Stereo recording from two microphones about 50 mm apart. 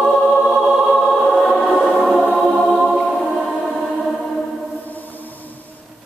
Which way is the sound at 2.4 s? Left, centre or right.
Centre.